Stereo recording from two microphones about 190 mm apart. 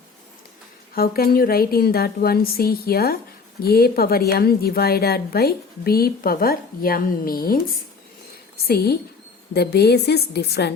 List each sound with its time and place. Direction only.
0.9 s a woman's voice: 50° left (ahead or behind)
8.6 s a woman's voice: 55° left (ahead or behind)